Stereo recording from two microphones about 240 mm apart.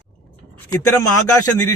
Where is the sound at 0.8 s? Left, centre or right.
Left.